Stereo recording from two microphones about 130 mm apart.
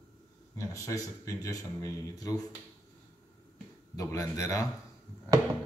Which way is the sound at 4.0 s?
25° left (ahead or behind).